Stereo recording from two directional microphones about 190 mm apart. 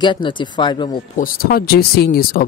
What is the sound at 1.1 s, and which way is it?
Speech, 50° left (ahead or behind).